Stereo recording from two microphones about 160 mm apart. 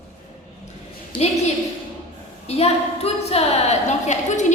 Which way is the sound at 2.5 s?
40° left (ahead or behind).